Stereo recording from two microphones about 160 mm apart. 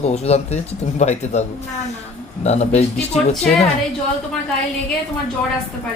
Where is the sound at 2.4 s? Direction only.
45° left (ahead or behind).